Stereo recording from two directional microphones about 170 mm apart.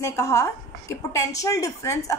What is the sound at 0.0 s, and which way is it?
A woman's voice, 15° left (ahead or behind).